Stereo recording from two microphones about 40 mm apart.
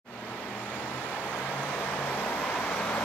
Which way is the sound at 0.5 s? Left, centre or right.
Left.